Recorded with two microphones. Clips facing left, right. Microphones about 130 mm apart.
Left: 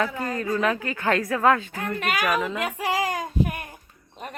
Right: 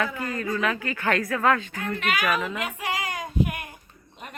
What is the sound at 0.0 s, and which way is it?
A woman's voice, 35° left (ahead or behind).